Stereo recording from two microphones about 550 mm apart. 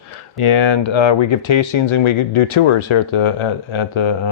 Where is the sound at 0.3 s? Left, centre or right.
Left.